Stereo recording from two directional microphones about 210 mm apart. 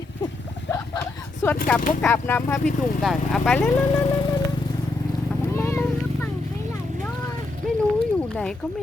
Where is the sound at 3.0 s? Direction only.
Centre (ahead or behind); by 4.4 s 20° left (ahead or behind).